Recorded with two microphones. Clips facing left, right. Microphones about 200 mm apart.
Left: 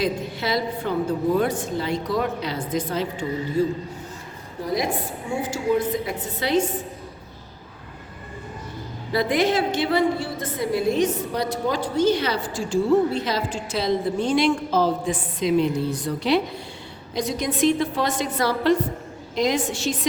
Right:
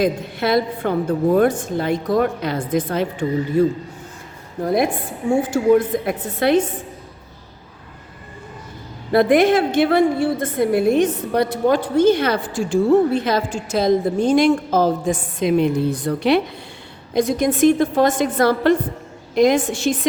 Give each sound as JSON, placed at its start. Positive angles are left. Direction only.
{"t": 0.0, "sound": "a woman's voice", "side_deg": -55}
{"t": 9.1, "sound": "a woman's voice", "side_deg": -55}